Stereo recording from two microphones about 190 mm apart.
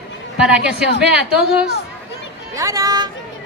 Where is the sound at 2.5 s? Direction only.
20° right (ahead or behind).